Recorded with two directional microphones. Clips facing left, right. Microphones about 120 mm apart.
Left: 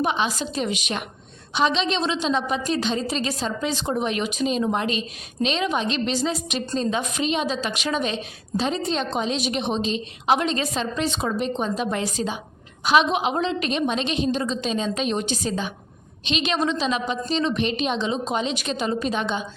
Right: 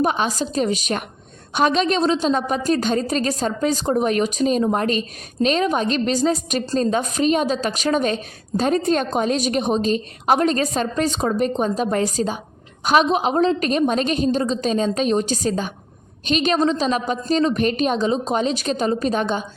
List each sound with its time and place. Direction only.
0.0 s a woman's voice: 45° right (ahead or behind)